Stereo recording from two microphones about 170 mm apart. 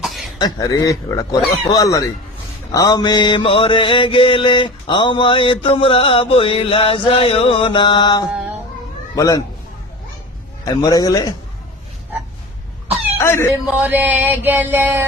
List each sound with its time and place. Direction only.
0.0 s a sound: centre (ahead or behind)
0.3 s mantra: 25° left (ahead or behind)
8.3 s music: 5° right (ahead or behind)
9.1 s mantra: 20° left (ahead or behind)
10.7 s mantra: 20° left (ahead or behind)
13.1 s speech: 15° left (ahead or behind)
13.7 s a sound: 10° right (ahead or behind)